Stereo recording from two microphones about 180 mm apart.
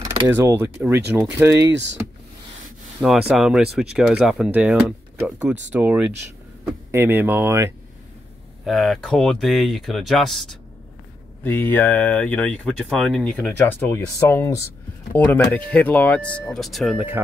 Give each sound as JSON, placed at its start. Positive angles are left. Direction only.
{"t": 0.3, "sound": "speech", "side_deg": -15}
{"t": 1.7, "sound": "speech", "side_deg": -80}
{"t": 3.0, "sound": "speech", "side_deg": -5}
{"t": 8.6, "sound": "speech", "side_deg": 0}